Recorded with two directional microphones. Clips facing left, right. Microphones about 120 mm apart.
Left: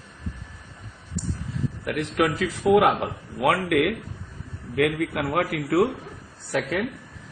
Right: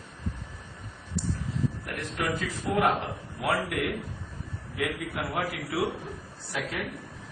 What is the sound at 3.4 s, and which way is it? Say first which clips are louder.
A man's voice: left 8 dB; 70° left (ahead or behind).